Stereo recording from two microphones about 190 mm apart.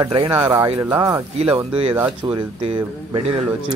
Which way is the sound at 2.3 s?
25° right (ahead or behind).